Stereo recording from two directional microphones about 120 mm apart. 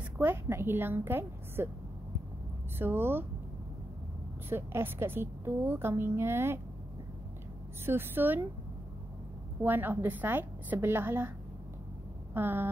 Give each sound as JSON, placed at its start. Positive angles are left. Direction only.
{"t": 0.2, "sound": "a woman's voice", "side_deg": -20}
{"t": 2.8, "sound": "a woman's voice", "side_deg": -20}
{"t": 4.5, "sound": "a woman's voice", "side_deg": -20}
{"t": 7.8, "sound": "a woman's voice", "side_deg": -20}
{"t": 9.6, "sound": "a woman's voice", "side_deg": -15}
{"t": 12.4, "sound": "a woman's voice", "side_deg": -15}